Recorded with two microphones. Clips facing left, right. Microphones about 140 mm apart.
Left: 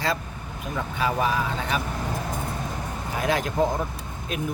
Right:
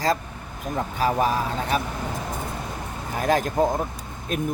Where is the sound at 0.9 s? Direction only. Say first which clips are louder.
Right 2 dB; 40° right (ahead or behind).